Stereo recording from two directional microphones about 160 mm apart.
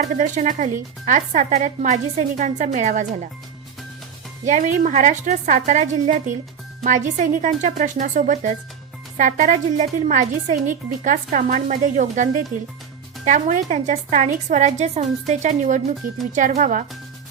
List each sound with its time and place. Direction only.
0.0 s a woman's voice: 50° right (ahead or behind)
4.4 s a woman's voice: 50° right (ahead or behind)